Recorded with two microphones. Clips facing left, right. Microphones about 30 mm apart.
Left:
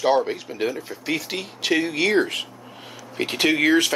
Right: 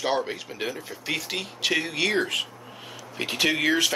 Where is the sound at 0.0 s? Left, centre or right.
Centre.